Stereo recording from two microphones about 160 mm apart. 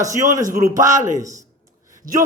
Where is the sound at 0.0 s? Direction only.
20° right (ahead or behind).